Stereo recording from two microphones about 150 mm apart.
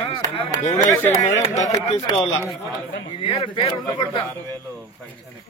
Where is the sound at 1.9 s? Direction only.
40° left (ahead or behind).